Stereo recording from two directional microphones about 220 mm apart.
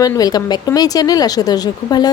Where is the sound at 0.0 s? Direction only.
15° left (ahead or behind).